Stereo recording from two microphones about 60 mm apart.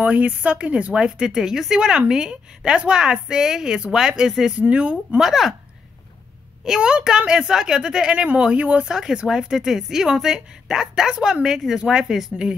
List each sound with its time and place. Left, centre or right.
0.0 s speech: right
4.6 s speech: right
5.2 s speech: centre
6.6 s speech: centre
8.9 s speech: centre